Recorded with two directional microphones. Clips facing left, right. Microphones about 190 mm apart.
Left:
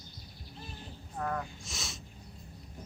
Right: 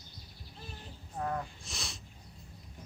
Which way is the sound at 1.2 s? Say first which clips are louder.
Even; 20° right (ahead or behind).